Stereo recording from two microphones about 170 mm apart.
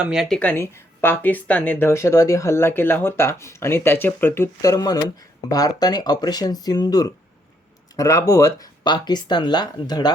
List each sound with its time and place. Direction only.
0.0 s speech: 5° right (ahead or behind); by 10.1 s 25° left (ahead or behind)